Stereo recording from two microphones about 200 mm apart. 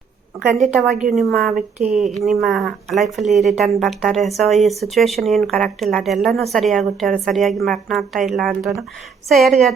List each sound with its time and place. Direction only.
0.6 s a woman's voice: centre (ahead or behind)
1.5 s speech: 35° right (ahead or behind)
2.2 s a woman's voice: centre (ahead or behind)